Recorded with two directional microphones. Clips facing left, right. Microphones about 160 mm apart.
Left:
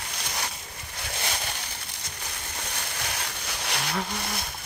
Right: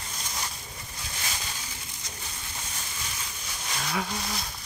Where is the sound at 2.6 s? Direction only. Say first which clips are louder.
Left 6 dB; 70° left (ahead or behind).